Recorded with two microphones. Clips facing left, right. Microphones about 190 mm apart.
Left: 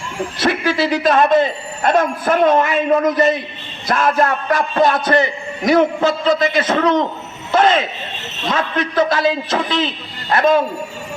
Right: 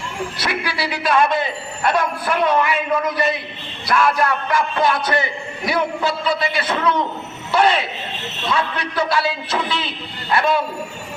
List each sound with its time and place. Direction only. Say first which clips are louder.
0.3 s a man's voice: left 10 dB; 45° left (ahead or behind)